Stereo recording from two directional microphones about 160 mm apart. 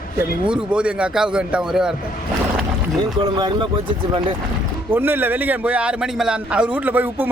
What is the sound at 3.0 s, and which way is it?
Speech, 30° right (ahead or behind).